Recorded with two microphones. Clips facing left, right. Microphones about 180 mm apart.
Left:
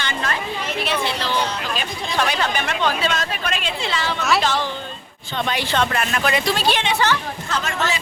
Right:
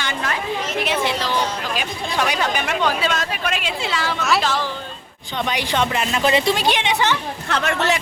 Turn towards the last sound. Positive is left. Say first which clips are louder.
# right 3 dB
turn(degrees=-65)  # may be behind; listen again after turning